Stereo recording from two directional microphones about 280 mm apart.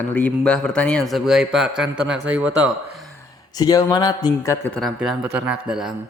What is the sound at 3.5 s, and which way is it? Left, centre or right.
A man's voice, centre.